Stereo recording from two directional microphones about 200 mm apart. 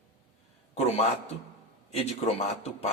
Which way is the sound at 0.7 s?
30° left (ahead or behind).